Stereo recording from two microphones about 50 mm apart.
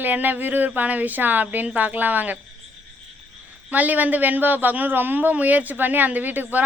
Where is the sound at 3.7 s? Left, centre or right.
Right.